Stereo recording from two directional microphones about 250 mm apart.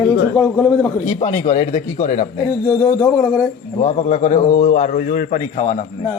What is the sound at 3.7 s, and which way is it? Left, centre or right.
A man's voice, left.